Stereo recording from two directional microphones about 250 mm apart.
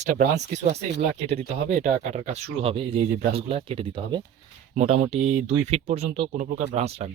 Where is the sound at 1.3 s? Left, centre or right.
Right.